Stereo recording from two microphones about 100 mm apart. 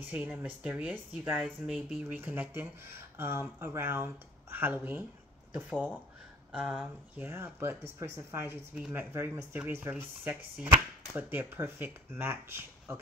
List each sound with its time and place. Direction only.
0.1 s speech: 15° right (ahead or behind)
7.2 s speech: 20° right (ahead or behind)